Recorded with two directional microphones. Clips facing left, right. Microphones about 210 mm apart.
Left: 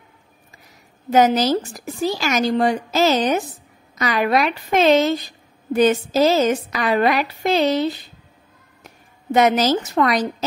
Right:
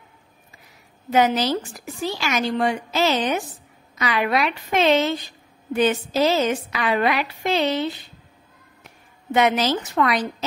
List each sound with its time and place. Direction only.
1.1 s a woman's voice: 40° left (ahead or behind)